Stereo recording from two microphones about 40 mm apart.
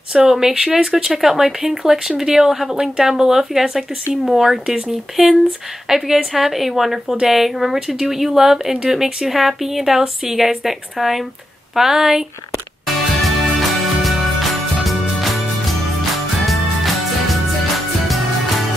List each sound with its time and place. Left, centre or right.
0.1 s speech: centre
7.9 s speech: centre
12.8 s music: centre